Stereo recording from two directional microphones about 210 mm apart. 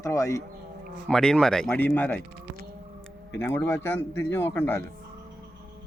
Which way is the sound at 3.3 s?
10° left (ahead or behind).